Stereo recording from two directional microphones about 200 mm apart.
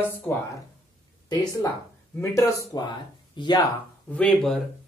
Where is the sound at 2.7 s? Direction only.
20° left (ahead or behind).